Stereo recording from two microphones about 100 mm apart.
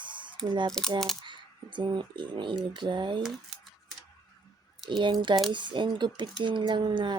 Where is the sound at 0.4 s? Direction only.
50° right (ahead or behind).